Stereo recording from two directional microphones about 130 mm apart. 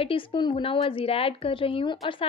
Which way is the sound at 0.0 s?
40° left (ahead or behind).